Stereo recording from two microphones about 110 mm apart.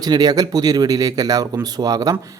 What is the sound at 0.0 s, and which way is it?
Speech, 35° right (ahead or behind).